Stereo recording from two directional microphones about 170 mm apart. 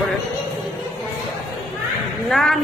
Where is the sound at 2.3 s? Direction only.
Centre (ahead or behind).